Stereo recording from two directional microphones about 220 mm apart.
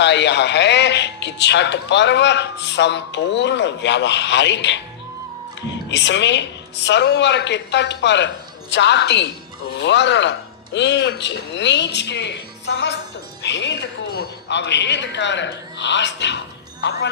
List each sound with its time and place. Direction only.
0.0 s a man's voice: 50° left (ahead or behind)